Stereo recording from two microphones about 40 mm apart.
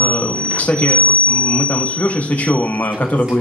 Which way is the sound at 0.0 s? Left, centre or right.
Left.